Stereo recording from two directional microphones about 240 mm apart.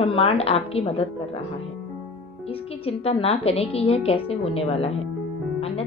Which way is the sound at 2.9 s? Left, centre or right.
Left.